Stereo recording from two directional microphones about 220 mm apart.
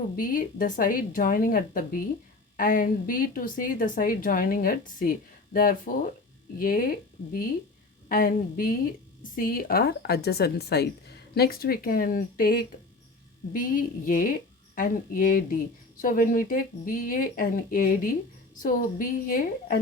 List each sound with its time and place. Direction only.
0.2 s a woman's voice: 40° left (ahead or behind)